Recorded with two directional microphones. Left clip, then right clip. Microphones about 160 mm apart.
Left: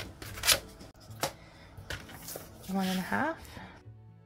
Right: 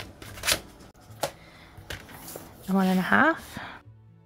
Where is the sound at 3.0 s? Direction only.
45° right (ahead or behind).